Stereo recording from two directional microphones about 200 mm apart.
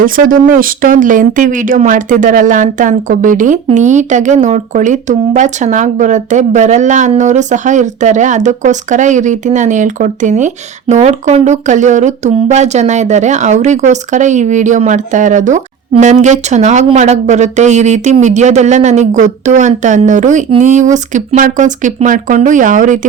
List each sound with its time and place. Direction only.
0.0 s speech: 45° right (ahead or behind)